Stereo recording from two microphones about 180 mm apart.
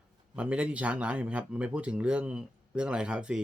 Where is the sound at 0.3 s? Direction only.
5° right (ahead or behind).